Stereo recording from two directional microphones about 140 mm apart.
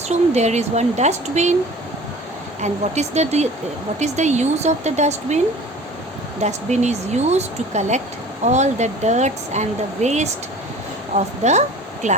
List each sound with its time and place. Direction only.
0.1 s speech: 55° right (ahead or behind)
2.6 s speech: 55° right (ahead or behind)
6.4 s speech: 55° right (ahead or behind)